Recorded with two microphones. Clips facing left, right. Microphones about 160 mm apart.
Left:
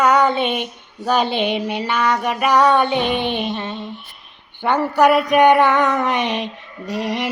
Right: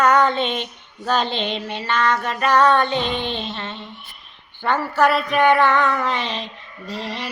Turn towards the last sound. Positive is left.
turn(degrees=15)  # may be behind; listen again after turning